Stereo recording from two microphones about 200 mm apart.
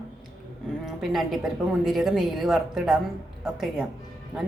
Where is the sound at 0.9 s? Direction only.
Centre (ahead or behind).